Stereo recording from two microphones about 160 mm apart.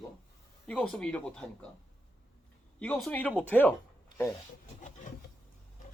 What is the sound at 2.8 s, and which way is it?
Speech, 5° left (ahead or behind).